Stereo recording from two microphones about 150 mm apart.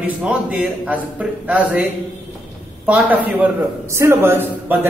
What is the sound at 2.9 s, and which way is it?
Speech, 10° right (ahead or behind).